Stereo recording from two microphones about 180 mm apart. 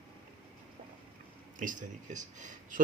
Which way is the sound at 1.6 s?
45° right (ahead or behind).